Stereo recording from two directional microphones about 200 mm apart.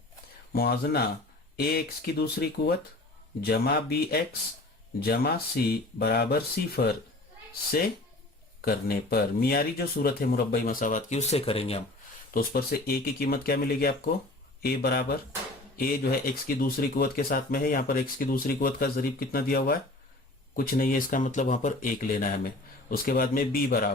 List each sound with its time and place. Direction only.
0.5 s speech: 50° left (ahead or behind)
8.6 s speech: 50° left (ahead or behind); by 11.8 s 30° left (ahead or behind)
12.3 s speech: 45° left (ahead or behind)